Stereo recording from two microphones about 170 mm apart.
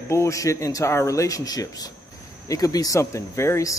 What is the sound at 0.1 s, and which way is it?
Speech, 20° left (ahead or behind).